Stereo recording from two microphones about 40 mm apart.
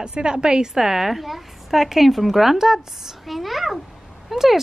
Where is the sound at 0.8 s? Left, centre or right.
Centre.